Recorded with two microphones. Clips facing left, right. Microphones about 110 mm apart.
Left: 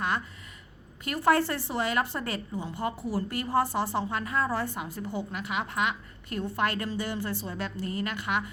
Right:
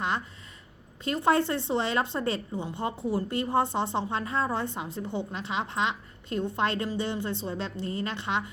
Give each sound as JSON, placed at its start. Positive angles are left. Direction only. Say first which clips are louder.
{"t": 1.0, "sound": "a woman's voice", "louder": "even", "side_deg": -25}